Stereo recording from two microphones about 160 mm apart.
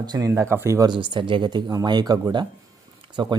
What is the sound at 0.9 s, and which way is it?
Speech, 30° right (ahead or behind).